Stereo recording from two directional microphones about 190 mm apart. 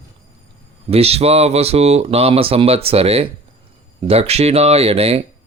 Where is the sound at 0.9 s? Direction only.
30° right (ahead or behind).